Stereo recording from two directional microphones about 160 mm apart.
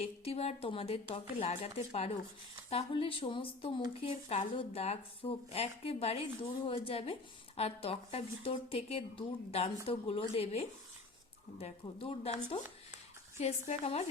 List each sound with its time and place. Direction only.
0.0 s a woman's voice: 40° left (ahead or behind)